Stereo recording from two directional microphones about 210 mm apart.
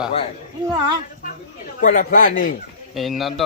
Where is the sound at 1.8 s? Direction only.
40° left (ahead or behind).